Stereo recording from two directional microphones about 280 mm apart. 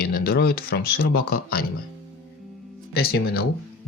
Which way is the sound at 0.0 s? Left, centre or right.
Left.